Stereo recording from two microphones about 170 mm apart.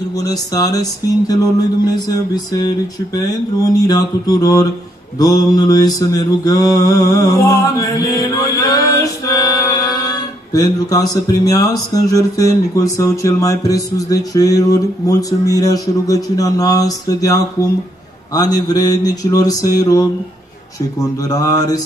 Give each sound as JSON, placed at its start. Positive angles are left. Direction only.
{"t": 0.2, "sound": "speech", "side_deg": 20}
{"t": 7.7, "sound": "music", "side_deg": 20}
{"t": 12.7, "sound": "speech", "side_deg": 20}
{"t": 21.2, "sound": "speech", "side_deg": 20}